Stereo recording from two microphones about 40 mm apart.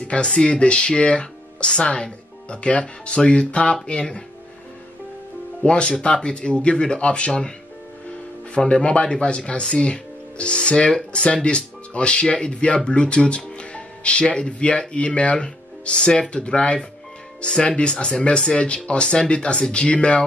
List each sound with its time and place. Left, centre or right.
0.0 s speech: left
5.6 s speech: left
8.5 s speech: left